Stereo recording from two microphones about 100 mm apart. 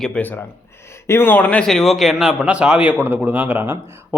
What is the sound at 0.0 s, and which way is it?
Speech, 15° left (ahead or behind).